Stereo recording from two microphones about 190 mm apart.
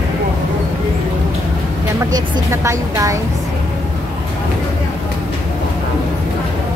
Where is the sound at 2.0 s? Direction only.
20° right (ahead or behind).